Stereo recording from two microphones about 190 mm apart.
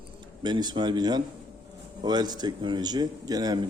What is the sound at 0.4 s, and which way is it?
A man's voice, 25° right (ahead or behind).